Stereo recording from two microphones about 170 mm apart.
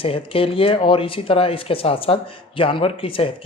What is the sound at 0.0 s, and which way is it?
Speech, 35° left (ahead or behind).